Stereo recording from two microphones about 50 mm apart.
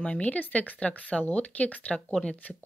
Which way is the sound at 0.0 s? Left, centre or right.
Left.